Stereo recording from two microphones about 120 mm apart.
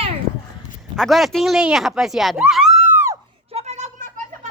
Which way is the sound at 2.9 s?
20° right (ahead or behind).